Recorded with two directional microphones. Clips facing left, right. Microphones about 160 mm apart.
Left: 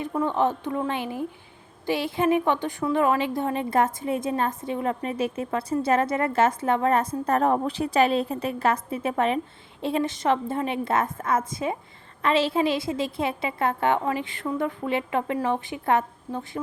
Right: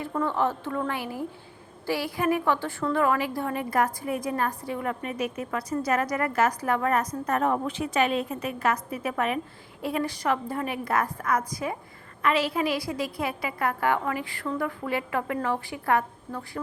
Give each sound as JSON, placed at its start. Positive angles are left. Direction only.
{"t": 0.0, "sound": "a woman's voice", "side_deg": 15}